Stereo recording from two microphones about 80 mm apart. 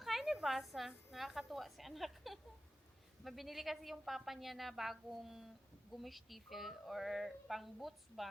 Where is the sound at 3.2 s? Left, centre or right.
Centre.